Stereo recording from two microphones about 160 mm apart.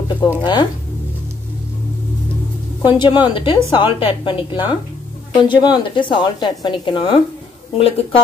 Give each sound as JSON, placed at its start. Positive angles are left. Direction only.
{"t": 0.4, "sound": "a woman's voice", "side_deg": 30}
{"t": 2.8, "sound": "a woman's voice", "side_deg": 30}